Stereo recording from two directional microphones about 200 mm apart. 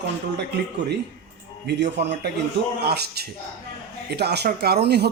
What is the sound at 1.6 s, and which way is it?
A man's voice, 60° right (ahead or behind).